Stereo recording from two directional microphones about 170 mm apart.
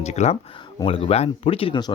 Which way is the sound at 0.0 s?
40° left (ahead or behind).